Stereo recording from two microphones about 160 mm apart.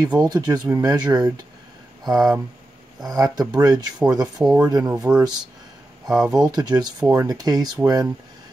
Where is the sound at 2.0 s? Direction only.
25° right (ahead or behind).